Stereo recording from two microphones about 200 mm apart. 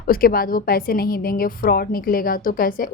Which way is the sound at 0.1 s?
45° left (ahead or behind).